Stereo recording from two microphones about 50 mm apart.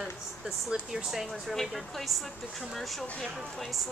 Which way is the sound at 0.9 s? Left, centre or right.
Centre.